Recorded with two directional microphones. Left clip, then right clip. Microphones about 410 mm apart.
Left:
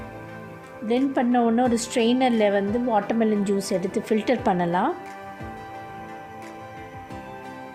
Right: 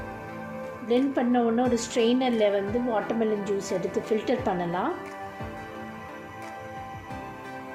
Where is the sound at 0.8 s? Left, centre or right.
Left.